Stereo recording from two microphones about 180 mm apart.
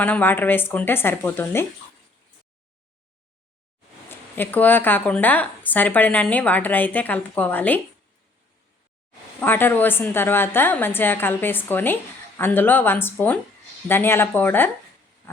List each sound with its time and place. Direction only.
0.0 s speech: 10° left (ahead or behind)
4.1 s speech: 10° left (ahead or behind)
9.4 s speech: 10° left (ahead or behind)